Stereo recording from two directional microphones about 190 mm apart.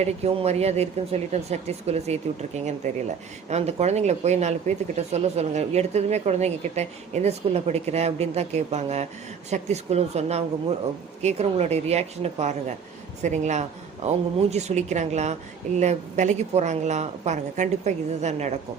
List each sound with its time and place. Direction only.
0.0 s a man's voice: 35° right (ahead or behind)